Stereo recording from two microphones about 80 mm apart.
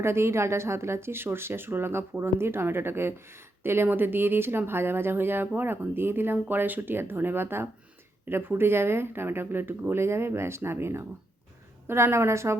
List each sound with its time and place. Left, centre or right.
0.0 s speech: right